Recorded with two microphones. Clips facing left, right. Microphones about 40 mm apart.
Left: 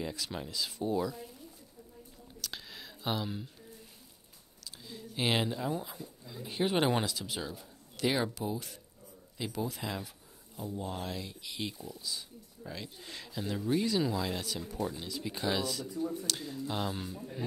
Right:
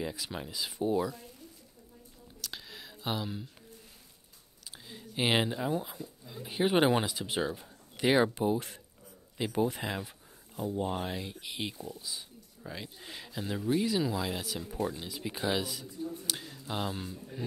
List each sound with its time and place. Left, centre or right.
0.0 s speech: centre
2.4 s a sound: centre
4.8 s speech: centre
7.2 s speech: right
9.5 s a sound: right
10.7 s speech: right; by 17.4 s centre